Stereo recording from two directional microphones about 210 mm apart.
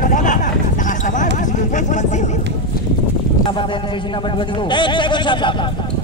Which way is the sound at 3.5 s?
25° left (ahead or behind).